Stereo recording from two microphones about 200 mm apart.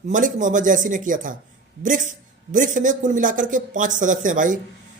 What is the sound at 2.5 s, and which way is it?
Speech, 40° right (ahead or behind).